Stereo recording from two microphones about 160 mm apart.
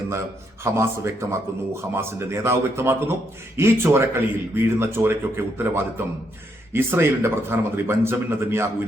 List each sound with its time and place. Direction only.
0.6 s speech: 15° right (ahead or behind)